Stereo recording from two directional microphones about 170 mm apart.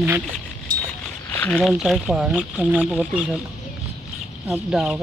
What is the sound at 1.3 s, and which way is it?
Speech, 5° left (ahead or behind).